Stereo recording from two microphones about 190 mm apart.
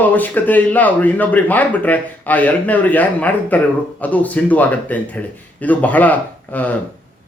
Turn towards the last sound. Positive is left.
turn(degrees=10)  # may be behind; listen again after turning